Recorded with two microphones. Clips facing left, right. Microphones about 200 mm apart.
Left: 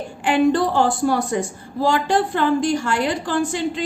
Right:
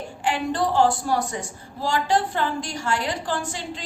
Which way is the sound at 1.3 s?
55° left (ahead or behind).